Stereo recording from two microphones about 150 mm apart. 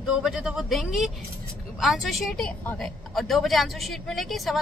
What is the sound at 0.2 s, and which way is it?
A woman's voice, 5° right (ahead or behind).